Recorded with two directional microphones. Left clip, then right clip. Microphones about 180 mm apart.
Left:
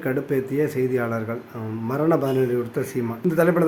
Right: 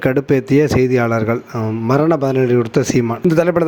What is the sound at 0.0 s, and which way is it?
A man's voice, 45° right (ahead or behind).